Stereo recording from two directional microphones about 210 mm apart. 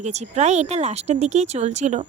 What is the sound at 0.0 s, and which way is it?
A woman's voice, 30° right (ahead or behind).